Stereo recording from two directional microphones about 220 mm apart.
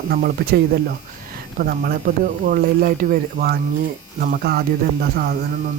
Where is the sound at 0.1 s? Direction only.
45° right (ahead or behind).